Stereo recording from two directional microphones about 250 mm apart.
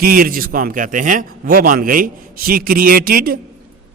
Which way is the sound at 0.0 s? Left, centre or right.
Right.